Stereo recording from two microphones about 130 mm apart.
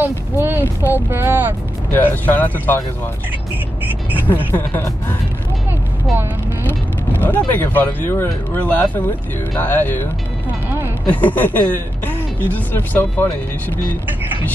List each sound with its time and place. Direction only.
0.0 s speech: 15° right (ahead or behind)
1.9 s speech: 15° left (ahead or behind)
4.3 s speech: 15° left (ahead or behind)
7.2 s speech: 15° left (ahead or behind)
11.1 s speech: 10° left (ahead or behind)